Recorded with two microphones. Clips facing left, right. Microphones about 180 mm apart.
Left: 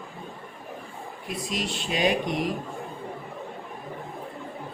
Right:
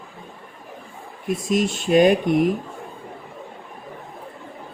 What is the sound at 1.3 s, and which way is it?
Speech, 50° right (ahead or behind).